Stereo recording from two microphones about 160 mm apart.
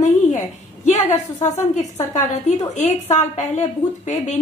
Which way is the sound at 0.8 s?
45° left (ahead or behind).